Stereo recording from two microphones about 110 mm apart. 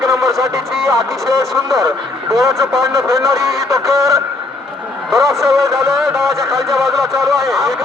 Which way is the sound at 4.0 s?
30° right (ahead or behind).